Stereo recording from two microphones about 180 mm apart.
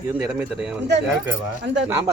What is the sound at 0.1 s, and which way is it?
Speech, 10° right (ahead or behind).